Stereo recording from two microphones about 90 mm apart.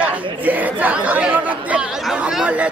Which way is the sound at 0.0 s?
20° right (ahead or behind).